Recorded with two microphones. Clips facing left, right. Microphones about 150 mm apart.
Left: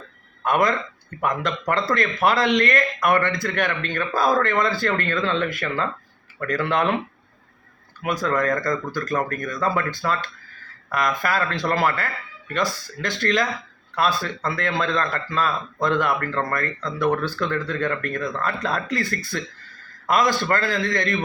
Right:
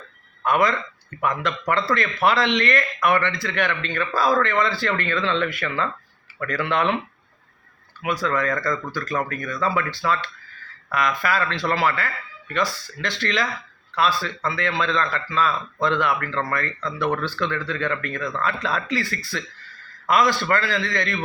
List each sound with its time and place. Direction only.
0.4 s speech: 50° left (ahead or behind)
8.2 s speech: 45° left (ahead or behind)